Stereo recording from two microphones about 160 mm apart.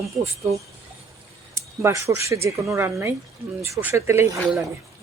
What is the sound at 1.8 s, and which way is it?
Speech, 15° right (ahead or behind).